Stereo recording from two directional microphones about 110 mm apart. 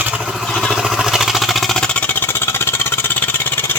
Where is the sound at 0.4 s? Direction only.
5° left (ahead or behind).